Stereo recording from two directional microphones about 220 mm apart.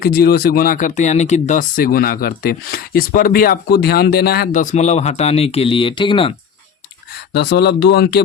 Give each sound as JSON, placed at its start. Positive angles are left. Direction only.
{"t": 0.0, "sound": "speech", "side_deg": 45}
{"t": 7.3, "sound": "speech", "side_deg": 50}